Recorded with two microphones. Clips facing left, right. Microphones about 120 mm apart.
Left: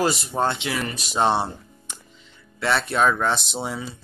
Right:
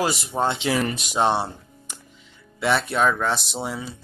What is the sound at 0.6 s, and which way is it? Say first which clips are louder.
Speech: right 5 dB; 35° right (ahead or behind).